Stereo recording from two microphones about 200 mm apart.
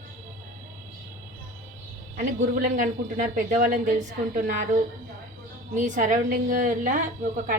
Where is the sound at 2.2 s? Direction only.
40° right (ahead or behind).